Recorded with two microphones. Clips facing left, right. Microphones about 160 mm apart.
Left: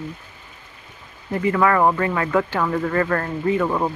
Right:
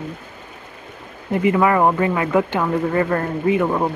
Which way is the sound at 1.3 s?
20° right (ahead or behind).